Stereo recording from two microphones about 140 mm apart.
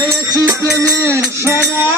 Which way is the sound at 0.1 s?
25° right (ahead or behind).